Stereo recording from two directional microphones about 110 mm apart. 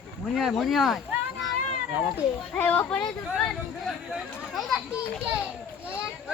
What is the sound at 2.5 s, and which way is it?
Speech, 15° left (ahead or behind).